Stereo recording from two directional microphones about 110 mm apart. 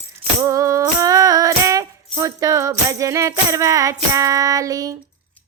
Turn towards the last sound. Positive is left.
turn(degrees=-30)  # may be behind; listen again after turning